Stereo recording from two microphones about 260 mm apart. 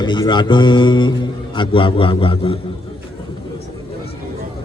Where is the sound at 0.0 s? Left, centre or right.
Centre.